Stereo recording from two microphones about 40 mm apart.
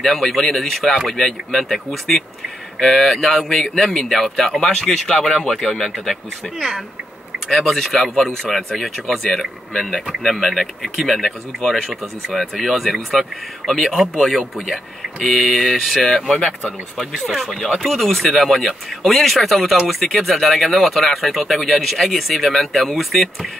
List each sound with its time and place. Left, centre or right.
0.0 s speech: centre
7.5 s speech: centre
15.2 s speech: centre
16.3 s speech: centre
17.1 s speech: centre
17.4 s speech: centre